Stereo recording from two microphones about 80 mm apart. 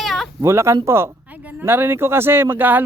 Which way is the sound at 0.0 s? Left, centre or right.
Centre.